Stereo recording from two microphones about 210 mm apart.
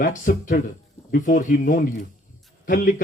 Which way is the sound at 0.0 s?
40° left (ahead or behind).